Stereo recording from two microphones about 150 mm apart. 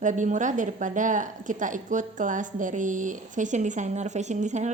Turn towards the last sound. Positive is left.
turn(degrees=-50)  # may be behind; listen again after turning